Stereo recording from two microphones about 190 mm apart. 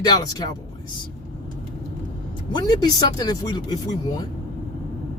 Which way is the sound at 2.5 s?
20° left (ahead or behind).